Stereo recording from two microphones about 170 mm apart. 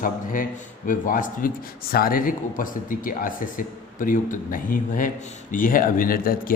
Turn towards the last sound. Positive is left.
turn(degrees=60)  # may be behind; listen again after turning